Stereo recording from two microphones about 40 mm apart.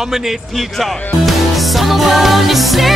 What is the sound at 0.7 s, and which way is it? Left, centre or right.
Music, centre.